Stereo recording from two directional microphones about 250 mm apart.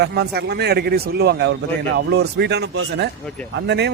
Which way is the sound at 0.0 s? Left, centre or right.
Right.